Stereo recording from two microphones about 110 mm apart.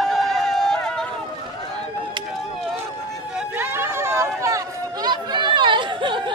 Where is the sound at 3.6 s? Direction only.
20° right (ahead or behind).